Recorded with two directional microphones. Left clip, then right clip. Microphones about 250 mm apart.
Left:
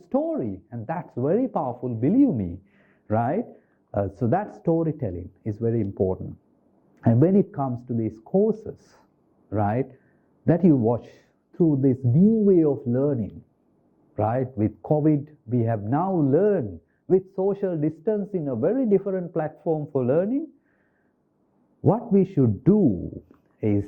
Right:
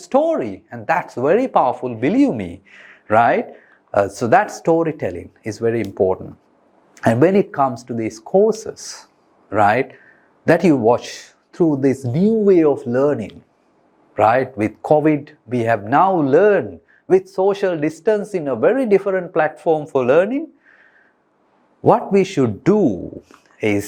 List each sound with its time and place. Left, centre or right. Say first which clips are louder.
0.0 s speech: right 9 dB; centre
8.2 s speech: right 8 dB; centre
8.5 s speech: right 9 dB; centre
10.9 s a sound: right 10 dB; centre
11.6 s speech: right 5 dB; centre
21.8 s speech: right 8 dB; centre
23.3 s a sound: right 7 dB; centre